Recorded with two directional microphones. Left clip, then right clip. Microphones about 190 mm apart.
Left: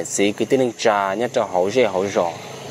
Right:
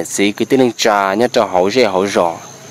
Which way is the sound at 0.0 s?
25° right (ahead or behind).